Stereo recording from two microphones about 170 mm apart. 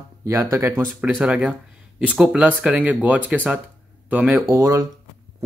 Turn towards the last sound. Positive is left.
turn(degrees=-20)  # may be behind; listen again after turning